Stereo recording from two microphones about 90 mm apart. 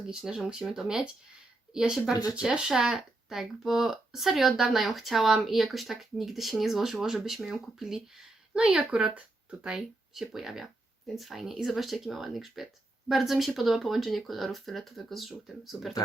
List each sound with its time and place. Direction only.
0.0 s speech: 5° right (ahead or behind)